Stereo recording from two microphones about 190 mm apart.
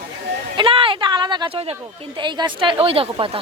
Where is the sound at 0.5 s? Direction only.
25° right (ahead or behind).